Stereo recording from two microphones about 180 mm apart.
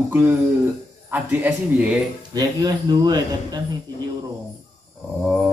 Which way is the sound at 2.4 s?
20° right (ahead or behind).